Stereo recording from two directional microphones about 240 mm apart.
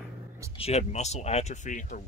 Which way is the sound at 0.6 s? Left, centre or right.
Left.